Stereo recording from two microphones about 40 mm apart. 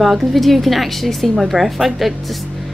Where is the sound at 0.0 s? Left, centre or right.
Centre.